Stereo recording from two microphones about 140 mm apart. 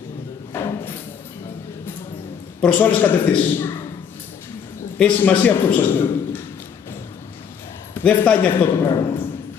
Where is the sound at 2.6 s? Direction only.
10° left (ahead or behind).